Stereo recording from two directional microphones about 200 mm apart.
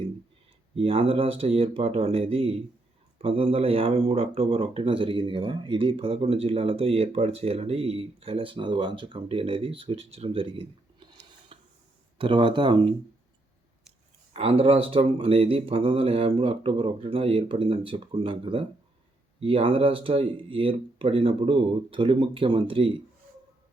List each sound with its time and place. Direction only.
0.8 s speech: 30° right (ahead or behind)
11.1 s a sound: 30° right (ahead or behind)
12.1 s speech: 25° right (ahead or behind)
14.3 s speech: 30° right (ahead or behind)